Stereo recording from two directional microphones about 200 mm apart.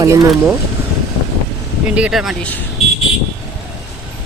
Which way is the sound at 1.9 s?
5° right (ahead or behind).